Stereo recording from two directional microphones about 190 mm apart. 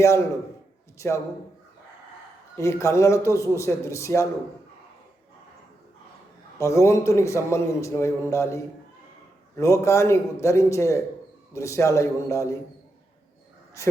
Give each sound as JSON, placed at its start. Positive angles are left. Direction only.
{"t": 0.9, "sound": "a man's voice", "side_deg": 15}
{"t": 2.6, "sound": "a man's voice", "side_deg": 15}
{"t": 6.6, "sound": "a man's voice", "side_deg": 15}